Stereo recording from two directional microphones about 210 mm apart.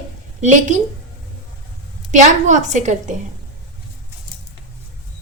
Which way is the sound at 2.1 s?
35° right (ahead or behind).